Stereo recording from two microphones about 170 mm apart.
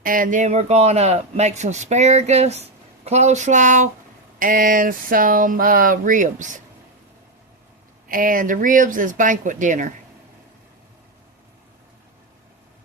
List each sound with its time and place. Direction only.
0.0 s a man's voice: 55° right (ahead or behind)
8.0 s speech: 55° right (ahead or behind)